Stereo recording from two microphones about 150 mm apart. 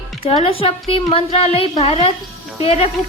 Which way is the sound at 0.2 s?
40° left (ahead or behind).